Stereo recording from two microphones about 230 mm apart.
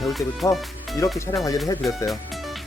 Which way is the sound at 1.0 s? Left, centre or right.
Centre.